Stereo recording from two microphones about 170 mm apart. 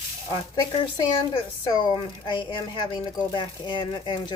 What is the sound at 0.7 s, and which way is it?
A woman's voice, 30° left (ahead or behind).